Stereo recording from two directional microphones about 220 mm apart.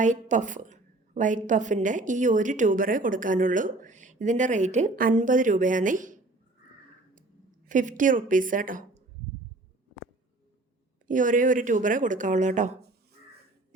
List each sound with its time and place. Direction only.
0.0 s a woman's voice: 35° right (ahead or behind)
7.7 s a woman's voice: 35° right (ahead or behind)
11.0 s a woman's voice: 35° right (ahead or behind)